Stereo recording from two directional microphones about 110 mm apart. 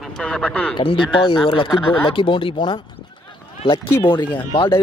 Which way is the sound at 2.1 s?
50° left (ahead or behind).